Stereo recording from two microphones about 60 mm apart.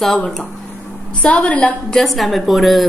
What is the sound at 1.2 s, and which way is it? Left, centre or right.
Speech, left.